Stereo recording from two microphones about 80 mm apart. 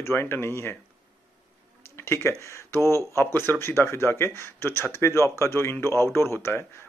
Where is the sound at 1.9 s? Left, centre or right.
Left.